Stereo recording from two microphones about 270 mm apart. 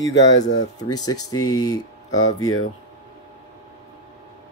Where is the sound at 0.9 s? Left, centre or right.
Centre.